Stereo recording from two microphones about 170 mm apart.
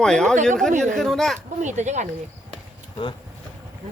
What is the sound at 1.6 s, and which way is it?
Speech, 45° right (ahead or behind).